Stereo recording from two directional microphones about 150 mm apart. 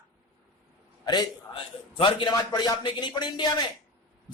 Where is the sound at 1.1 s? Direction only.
30° left (ahead or behind).